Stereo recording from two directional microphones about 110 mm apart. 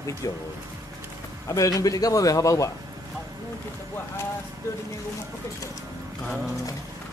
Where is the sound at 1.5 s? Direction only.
30° left (ahead or behind).